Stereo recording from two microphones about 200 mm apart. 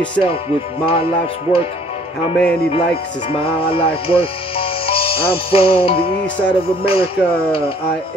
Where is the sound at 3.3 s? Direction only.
25° left (ahead or behind).